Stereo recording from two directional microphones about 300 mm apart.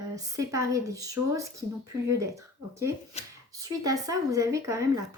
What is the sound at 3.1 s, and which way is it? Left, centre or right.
Speech, left.